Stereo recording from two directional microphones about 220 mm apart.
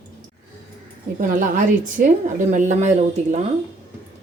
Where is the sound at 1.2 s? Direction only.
35° right (ahead or behind).